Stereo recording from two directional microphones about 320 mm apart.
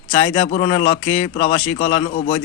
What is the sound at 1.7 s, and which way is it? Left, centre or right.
Speech, left.